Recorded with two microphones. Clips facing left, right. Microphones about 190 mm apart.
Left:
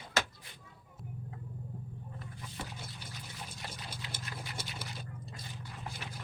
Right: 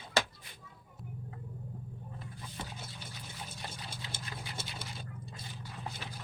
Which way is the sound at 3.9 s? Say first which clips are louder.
Even; 25° right (ahead or behind).